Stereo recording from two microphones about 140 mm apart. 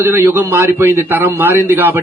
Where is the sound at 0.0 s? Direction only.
15° right (ahead or behind).